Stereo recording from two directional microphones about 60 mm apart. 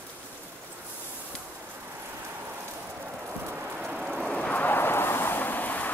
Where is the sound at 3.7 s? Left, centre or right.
Centre.